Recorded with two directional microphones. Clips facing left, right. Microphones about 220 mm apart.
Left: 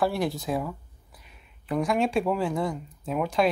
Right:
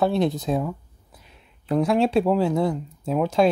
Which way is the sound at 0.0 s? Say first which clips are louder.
Right 5 dB; 20° right (ahead or behind).